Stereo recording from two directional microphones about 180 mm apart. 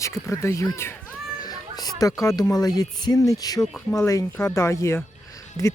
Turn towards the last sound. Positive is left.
turn(degrees=15)  # may be behind; listen again after turning